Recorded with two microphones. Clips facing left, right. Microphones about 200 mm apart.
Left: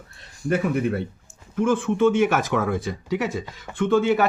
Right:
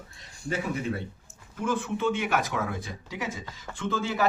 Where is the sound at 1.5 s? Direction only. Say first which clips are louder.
Left 8 dB; 50° left (ahead or behind).